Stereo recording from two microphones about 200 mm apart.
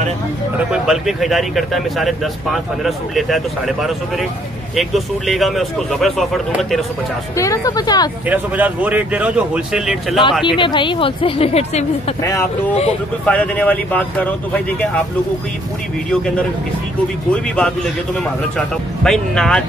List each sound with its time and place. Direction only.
0.7 s speech: centre (ahead or behind)
7.3 s speech: 15° left (ahead or behind)
8.3 s speech: 10° right (ahead or behind)
10.4 s speech: 25° left (ahead or behind)
12.2 s speech: 15° left (ahead or behind)
17.3 s speech: 5° left (ahead or behind)
19.0 s speech: 5° left (ahead or behind)